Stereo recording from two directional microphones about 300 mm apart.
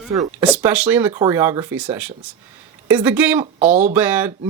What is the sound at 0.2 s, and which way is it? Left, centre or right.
Speech, centre.